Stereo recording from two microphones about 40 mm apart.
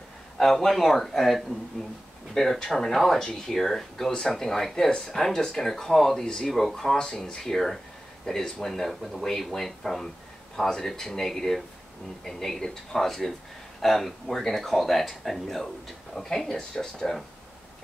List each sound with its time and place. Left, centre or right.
0.4 s speech: centre
6.2 s speech: centre
6.5 s speech: centre